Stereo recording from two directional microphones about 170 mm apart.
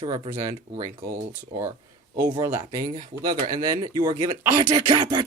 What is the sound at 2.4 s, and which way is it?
Speech, 20° right (ahead or behind).